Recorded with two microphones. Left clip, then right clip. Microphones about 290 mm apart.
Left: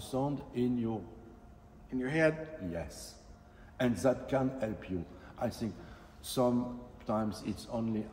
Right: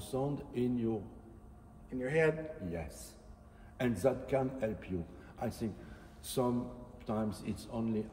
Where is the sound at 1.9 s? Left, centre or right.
Centre.